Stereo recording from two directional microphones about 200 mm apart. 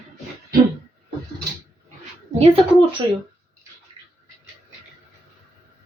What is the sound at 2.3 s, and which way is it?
Speech, 25° right (ahead or behind).